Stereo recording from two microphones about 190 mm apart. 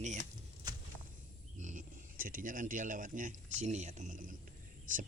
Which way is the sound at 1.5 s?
40° right (ahead or behind).